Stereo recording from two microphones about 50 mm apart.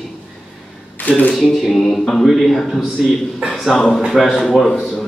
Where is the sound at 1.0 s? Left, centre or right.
Left.